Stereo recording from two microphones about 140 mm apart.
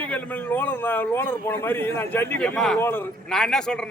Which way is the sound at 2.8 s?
15° left (ahead or behind).